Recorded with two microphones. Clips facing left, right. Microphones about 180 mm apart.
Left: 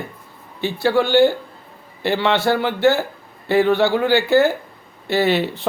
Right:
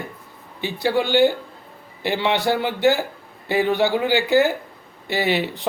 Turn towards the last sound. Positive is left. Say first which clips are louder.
# left 4 dB
turn(degrees=-15)  # may be behind; listen again after turning